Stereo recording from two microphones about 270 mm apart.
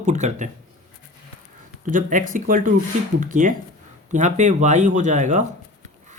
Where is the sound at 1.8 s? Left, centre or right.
Right.